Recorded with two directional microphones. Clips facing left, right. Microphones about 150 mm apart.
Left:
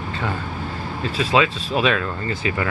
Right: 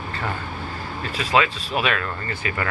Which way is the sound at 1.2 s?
30° left (ahead or behind).